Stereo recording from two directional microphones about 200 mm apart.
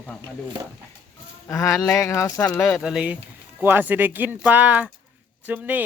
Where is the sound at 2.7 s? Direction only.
5° right (ahead or behind).